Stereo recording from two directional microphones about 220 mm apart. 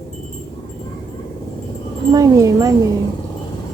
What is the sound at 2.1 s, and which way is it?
Speech, 15° right (ahead or behind).